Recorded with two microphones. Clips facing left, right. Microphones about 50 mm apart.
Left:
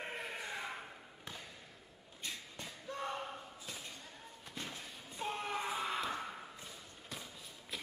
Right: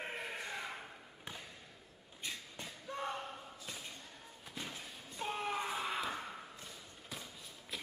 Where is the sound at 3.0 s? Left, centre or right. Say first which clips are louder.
Even; centre.